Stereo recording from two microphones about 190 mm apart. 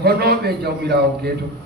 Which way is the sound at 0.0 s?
55° right (ahead or behind).